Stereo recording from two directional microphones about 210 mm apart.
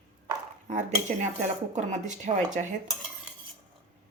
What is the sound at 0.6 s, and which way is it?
Speech, 35° right (ahead or behind).